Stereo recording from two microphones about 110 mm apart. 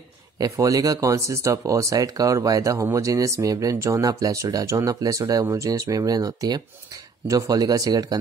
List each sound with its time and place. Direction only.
0.4 s speech: 30° right (ahead or behind)